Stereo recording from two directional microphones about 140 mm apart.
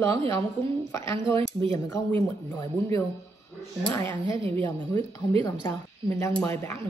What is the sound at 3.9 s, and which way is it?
A woman's voice, 20° left (ahead or behind).